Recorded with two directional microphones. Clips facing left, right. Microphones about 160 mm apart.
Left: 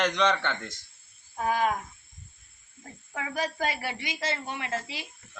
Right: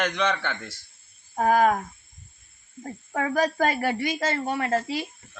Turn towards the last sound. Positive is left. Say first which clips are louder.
# right 9 dB
turn(degrees=-45)  # may be behind; listen again after turning